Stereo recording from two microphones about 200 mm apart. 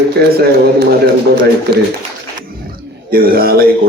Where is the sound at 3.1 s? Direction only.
45° right (ahead or behind).